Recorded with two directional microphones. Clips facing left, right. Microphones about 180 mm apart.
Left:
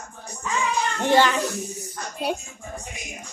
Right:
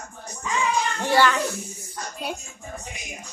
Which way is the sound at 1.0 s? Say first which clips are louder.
Left 2 dB; 20° left (ahead or behind).